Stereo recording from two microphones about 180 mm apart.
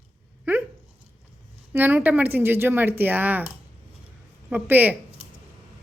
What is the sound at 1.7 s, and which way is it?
Speech, 10° right (ahead or behind).